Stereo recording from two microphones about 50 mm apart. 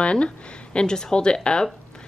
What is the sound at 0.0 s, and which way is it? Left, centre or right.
A woman's voice, left.